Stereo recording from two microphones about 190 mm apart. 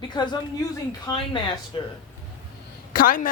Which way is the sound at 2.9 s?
50° left (ahead or behind).